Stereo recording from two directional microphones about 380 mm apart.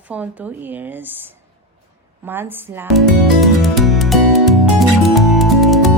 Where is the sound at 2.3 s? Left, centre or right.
Centre.